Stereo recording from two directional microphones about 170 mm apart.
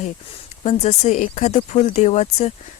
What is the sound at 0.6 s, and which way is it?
Speech, 40° left (ahead or behind).